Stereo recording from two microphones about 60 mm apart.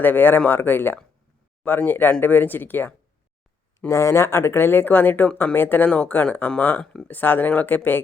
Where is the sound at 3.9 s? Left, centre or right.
Left.